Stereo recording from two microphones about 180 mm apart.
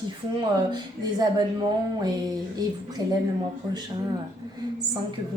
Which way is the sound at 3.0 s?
20° right (ahead or behind).